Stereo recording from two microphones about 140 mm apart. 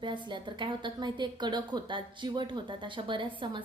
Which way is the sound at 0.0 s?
35° right (ahead or behind).